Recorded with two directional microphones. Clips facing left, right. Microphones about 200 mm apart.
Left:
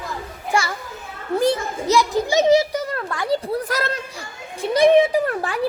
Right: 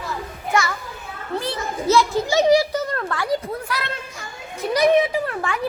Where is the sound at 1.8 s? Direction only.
15° left (ahead or behind).